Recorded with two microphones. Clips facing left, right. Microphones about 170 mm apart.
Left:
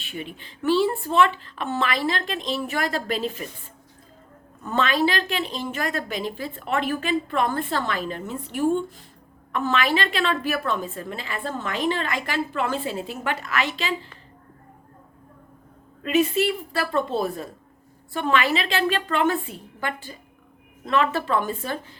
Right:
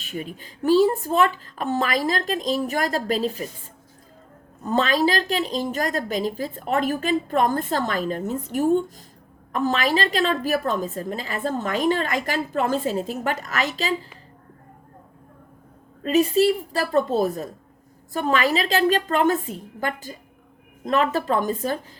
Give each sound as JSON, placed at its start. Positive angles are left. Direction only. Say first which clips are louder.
{"t": 0.0, "sound": "a woman's voice", "louder": "right 3 dB", "side_deg": -40}
{"t": 4.6, "sound": "a woman's voice", "louder": "right 2 dB", "side_deg": -40}
{"t": 16.0, "sound": "a woman's voice", "louder": "right 3 dB", "side_deg": -35}